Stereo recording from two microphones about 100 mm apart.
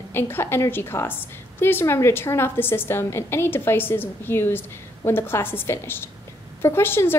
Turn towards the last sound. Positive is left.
turn(degrees=25)  # may be behind; listen again after turning